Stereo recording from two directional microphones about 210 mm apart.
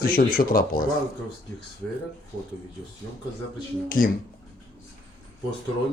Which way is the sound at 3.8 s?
40° left (ahead or behind).